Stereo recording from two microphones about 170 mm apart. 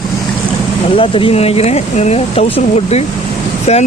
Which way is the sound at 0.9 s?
30° left (ahead or behind).